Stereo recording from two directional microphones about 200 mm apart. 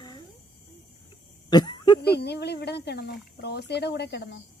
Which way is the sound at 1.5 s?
20° left (ahead or behind).